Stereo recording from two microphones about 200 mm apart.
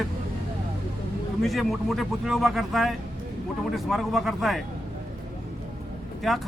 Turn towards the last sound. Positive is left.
turn(degrees=0)  # may be behind; listen again after turning